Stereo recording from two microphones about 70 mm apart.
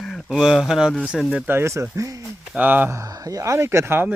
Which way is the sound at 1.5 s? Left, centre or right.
Right.